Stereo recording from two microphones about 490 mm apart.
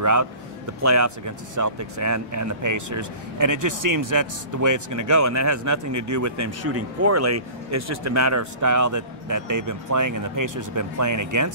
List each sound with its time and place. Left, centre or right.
0.0 s speech: right